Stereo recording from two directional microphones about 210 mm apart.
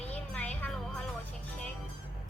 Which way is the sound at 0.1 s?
5° left (ahead or behind).